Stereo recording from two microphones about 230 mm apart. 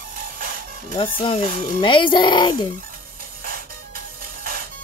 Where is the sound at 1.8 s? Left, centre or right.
Left.